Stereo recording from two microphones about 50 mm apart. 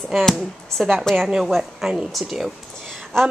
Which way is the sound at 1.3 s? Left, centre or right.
Centre.